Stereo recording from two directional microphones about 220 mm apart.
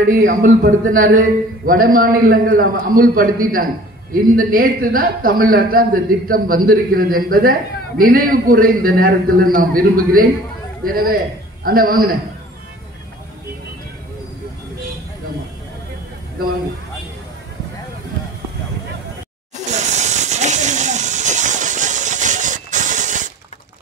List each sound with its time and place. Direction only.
0.3 s a man's voice: 35° right (ahead or behind)
19.5 s hiss: 30° right (ahead or behind)